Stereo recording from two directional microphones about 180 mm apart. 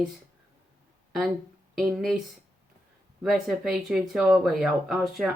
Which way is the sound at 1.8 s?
Centre (ahead or behind).